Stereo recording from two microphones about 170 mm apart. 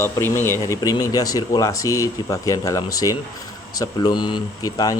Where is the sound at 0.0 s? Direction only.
15° left (ahead or behind).